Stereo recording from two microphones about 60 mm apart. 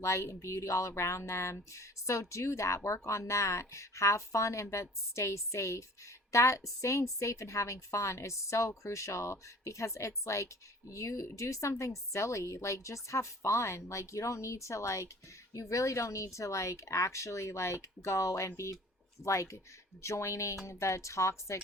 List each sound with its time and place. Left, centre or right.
0.0 s a woman's voice: left